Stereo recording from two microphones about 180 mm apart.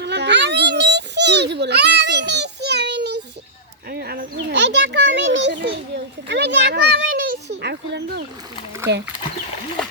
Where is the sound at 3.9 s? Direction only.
60° right (ahead or behind).